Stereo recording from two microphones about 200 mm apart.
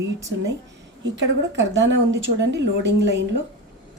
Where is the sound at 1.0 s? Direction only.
65° right (ahead or behind).